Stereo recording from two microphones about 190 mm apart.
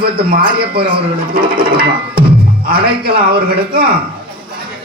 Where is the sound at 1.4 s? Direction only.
25° right (ahead or behind).